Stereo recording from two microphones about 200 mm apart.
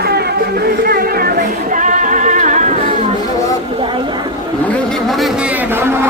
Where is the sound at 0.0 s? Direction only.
50° right (ahead or behind); by 3.1 s 35° right (ahead or behind).